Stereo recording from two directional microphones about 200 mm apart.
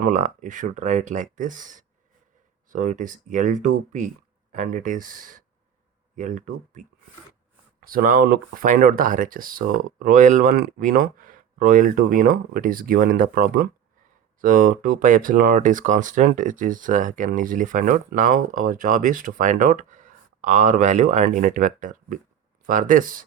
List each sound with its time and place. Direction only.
0.0 s speech: 40° right (ahead or behind)